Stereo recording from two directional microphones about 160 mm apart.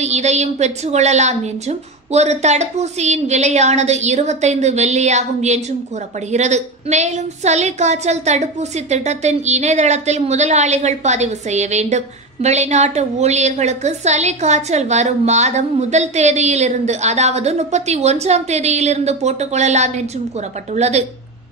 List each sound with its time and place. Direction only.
0.0 s a woman's voice: 45° right (ahead or behind)